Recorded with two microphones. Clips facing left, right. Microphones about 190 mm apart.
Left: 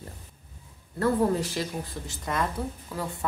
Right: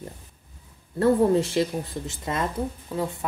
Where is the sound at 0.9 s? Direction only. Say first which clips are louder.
Right 5 dB; 25° right (ahead or behind).